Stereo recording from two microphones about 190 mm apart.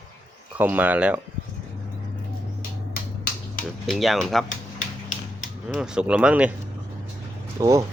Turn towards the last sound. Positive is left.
turn(degrees=-15)  # may be behind; listen again after turning